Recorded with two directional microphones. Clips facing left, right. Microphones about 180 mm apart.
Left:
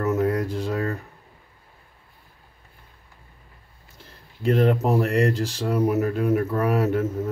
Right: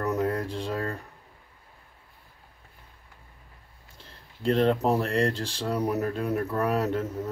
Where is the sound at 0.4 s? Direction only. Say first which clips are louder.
Left 5 dB; 30° right (ahead or behind).